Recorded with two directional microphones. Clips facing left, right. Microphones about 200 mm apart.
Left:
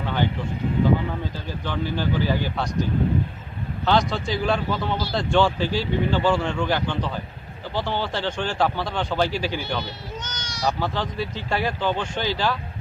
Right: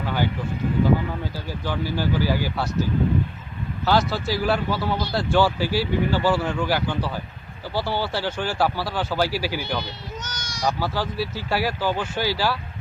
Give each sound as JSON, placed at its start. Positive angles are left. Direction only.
{"t": 0.0, "sound": "a sound", "side_deg": -5}
{"t": 1.5, "sound": "speech", "side_deg": -10}
{"t": 3.8, "sound": "speech", "side_deg": -5}